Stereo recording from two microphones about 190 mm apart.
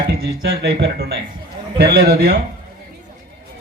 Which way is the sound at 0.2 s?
60° right (ahead or behind).